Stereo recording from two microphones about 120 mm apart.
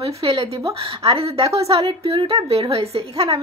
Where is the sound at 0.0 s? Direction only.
55° right (ahead or behind).